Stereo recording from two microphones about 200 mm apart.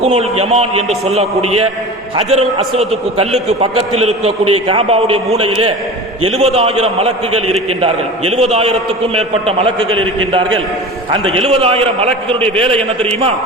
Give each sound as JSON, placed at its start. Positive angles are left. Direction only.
{"t": 0.0, "sound": "a man's voice", "side_deg": -30}
{"t": 11.3, "sound": "a man's voice", "side_deg": -30}